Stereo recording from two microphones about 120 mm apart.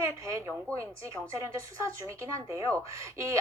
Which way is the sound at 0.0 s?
25° right (ahead or behind).